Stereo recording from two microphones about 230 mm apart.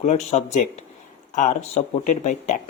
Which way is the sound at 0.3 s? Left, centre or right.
Left.